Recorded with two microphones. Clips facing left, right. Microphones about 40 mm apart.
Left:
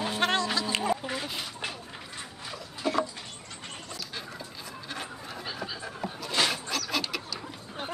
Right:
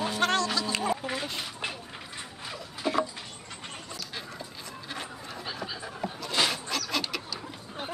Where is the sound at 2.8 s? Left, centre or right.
Centre.